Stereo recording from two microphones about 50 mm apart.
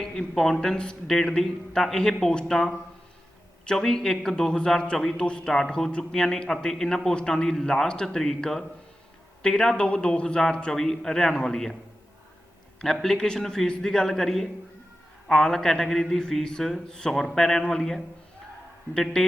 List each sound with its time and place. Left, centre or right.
0.0 s a man's voice: centre
3.7 s a man's voice: centre
5.2 s a man's voice: centre
12.8 s a man's voice: centre